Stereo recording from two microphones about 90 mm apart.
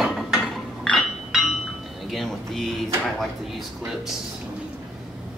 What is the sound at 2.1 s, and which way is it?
Music, centre (ahead or behind).